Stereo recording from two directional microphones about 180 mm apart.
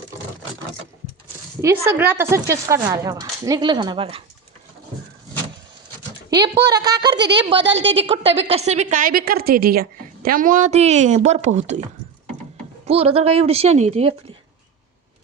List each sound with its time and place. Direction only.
1.9 s a woman's voice: 10° right (ahead or behind); by 4.2 s 30° right (ahead or behind)
6.3 s a woman's voice: 20° right (ahead or behind)
7.2 s a woman's voice: 75° right (ahead or behind)
7.6 s a woman's voice: 90° right
7.9 s a woman's voice: 30° right (ahead or behind)
12.8 s speech: 35° right (ahead or behind)